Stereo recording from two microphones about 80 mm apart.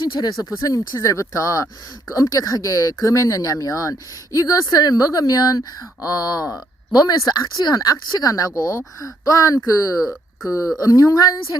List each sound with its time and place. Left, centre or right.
0.6 s speech: left
10.0 s speech: centre
10.8 s speech: left